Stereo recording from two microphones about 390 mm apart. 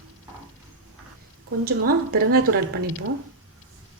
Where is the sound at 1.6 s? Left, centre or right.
Right.